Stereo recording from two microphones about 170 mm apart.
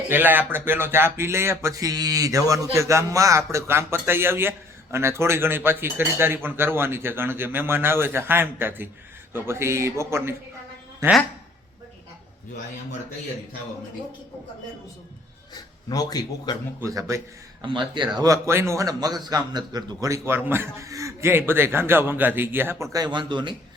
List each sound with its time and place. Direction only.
0.1 s speech: 10° right (ahead or behind)
15.5 s speech: 20° left (ahead or behind)
16.8 s speech: 20° right (ahead or behind)